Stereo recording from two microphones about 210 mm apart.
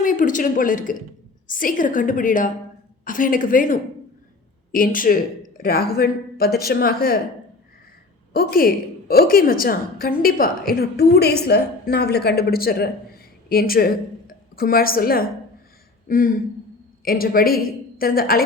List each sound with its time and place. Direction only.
0.0 s a woman's voice: 40° left (ahead or behind)
8.3 s a woman's voice: 45° left (ahead or behind)